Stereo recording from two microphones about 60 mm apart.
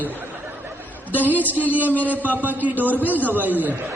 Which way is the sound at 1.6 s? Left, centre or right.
Right.